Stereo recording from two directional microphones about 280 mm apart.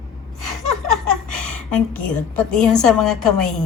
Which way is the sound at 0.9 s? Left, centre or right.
Centre.